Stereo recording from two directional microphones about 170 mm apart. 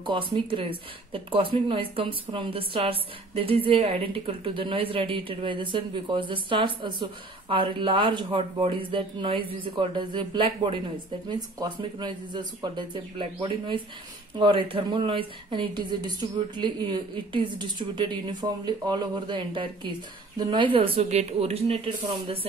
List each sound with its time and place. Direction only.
0.3 s a woman's voice: 30° right (ahead or behind)